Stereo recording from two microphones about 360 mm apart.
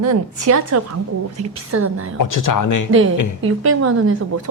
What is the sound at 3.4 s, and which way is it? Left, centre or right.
Speech, right.